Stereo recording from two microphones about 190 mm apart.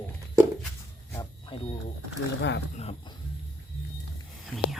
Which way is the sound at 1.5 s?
25° left (ahead or behind).